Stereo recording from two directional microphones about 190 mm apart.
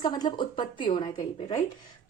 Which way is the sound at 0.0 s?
20° left (ahead or behind).